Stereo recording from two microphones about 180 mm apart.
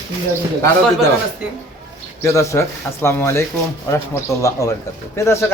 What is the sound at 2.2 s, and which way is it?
Speech, 15° left (ahead or behind).